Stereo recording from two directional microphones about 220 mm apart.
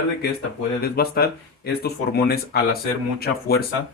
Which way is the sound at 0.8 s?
45° left (ahead or behind).